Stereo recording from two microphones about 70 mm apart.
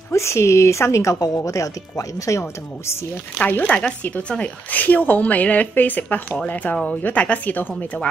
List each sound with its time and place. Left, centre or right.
0.1 s speech: left
1.2 s speech: left
3.3 s a woman's voice: left
3.6 s a woman's voice: centre